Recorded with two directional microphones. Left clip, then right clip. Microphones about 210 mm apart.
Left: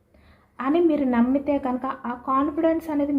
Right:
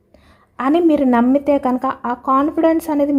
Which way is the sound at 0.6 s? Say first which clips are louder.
Right 7 dB; 50° right (ahead or behind).